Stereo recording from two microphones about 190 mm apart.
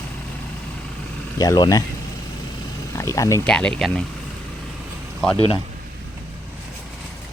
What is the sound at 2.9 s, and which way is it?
Speech, 15° left (ahead or behind).